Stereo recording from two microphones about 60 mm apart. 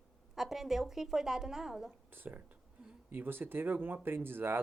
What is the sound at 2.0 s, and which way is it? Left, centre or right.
Speech, right.